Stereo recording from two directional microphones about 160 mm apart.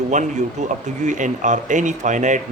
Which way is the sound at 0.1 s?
50° right (ahead or behind).